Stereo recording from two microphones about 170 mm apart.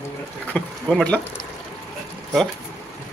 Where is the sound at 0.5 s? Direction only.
5° left (ahead or behind).